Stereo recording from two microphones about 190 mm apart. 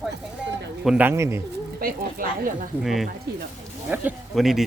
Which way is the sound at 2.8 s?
Centre (ahead or behind).